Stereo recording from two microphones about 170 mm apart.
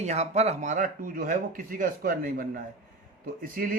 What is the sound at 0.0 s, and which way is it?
Speech, 40° right (ahead or behind).